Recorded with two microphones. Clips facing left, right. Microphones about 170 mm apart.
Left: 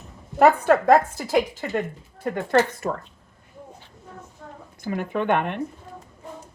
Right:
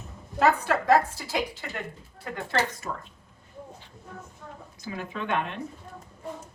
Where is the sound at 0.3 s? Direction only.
55° left (ahead or behind).